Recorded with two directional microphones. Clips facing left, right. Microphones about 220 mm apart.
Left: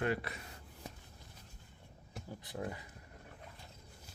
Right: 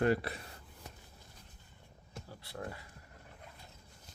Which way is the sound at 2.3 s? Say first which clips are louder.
Left 2 dB; 15° left (ahead or behind).